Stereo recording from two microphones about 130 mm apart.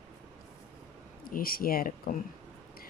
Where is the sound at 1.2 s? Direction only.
90° left.